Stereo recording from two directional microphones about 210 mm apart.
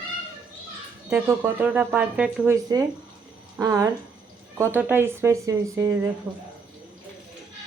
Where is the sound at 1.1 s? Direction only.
10° right (ahead or behind).